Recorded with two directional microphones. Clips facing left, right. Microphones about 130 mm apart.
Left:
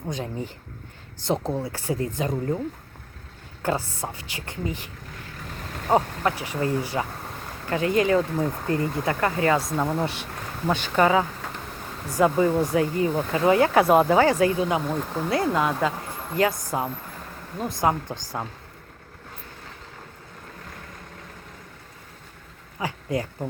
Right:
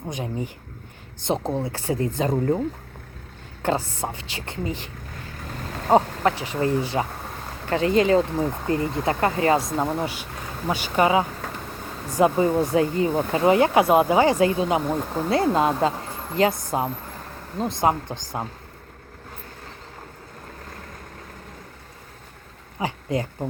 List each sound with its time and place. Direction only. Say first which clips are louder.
0.0 s speech: right 1 dB; 15° right (ahead or behind)
5.9 s speech: right 3 dB; 25° right (ahead or behind)
13.8 s speech: even; 10° right (ahead or behind)
22.8 s speech: right 2 dB; 25° right (ahead or behind)